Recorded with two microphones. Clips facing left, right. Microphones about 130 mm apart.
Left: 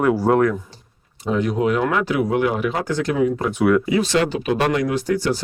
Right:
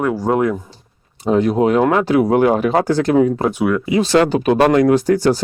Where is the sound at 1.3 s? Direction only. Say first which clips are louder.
Right 5 dB; 35° right (ahead or behind).